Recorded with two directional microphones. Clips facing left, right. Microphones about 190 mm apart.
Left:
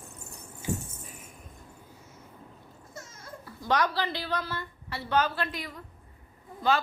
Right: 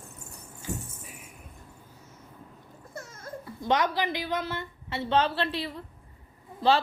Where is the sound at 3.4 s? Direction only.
20° right (ahead or behind).